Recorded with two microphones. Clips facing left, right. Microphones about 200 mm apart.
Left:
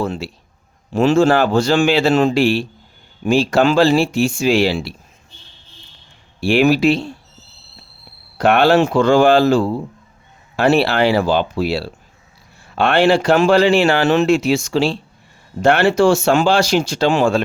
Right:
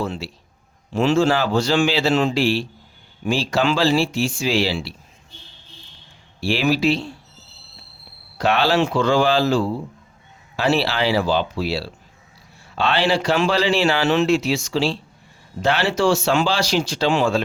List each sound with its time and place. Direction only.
0.0 s a man's voice: 50° left (ahead or behind)
6.4 s speech: 55° left (ahead or behind)
8.4 s speech: 55° left (ahead or behind)